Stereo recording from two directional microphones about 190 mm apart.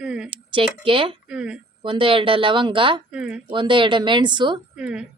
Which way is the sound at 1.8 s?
25° right (ahead or behind).